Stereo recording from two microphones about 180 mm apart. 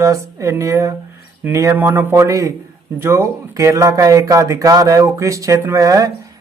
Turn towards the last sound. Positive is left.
turn(degrees=-20)  # may be behind; listen again after turning